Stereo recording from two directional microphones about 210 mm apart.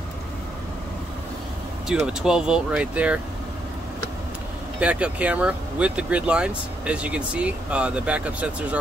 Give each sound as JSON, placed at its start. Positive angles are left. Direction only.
{"t": 1.9, "sound": "speech", "side_deg": -5}
{"t": 4.7, "sound": "speech", "side_deg": -5}